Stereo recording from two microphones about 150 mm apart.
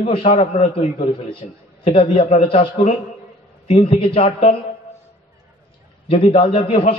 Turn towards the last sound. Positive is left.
turn(degrees=45)  # may be behind; listen again after turning